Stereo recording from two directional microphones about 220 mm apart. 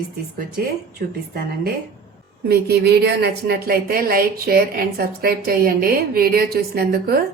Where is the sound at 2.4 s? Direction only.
45° right (ahead or behind).